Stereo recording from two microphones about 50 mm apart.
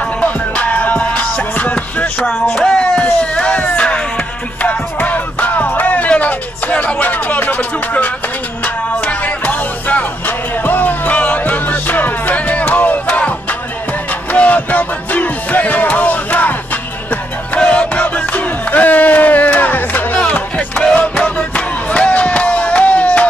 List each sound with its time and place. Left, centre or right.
0.0 s music: left
14.3 s music: left
17.6 s battle cry: left
20.2 s music: left
21.5 s crowd: left